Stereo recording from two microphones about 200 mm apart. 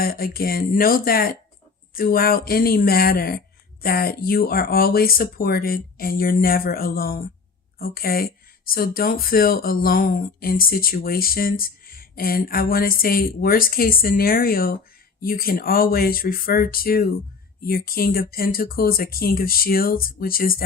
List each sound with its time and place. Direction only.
0.0 s speech: 50° left (ahead or behind)